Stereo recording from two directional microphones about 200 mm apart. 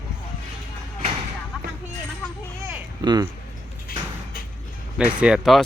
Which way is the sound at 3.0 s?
20° right (ahead or behind).